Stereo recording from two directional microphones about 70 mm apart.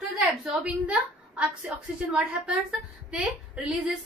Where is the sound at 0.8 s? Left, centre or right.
Centre.